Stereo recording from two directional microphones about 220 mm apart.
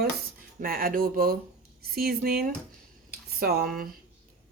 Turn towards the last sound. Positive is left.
turn(degrees=-40)  # may be behind; listen again after turning